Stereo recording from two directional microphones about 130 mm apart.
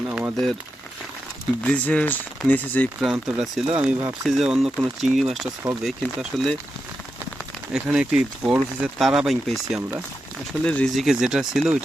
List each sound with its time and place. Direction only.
0.1 s a sound: 15° right (ahead or behind)
1.6 s speech: 10° left (ahead or behind)
3.0 s speech: 5° right (ahead or behind)
7.7 s speech: 10° right (ahead or behind)
10.6 s speech: 10° left (ahead or behind)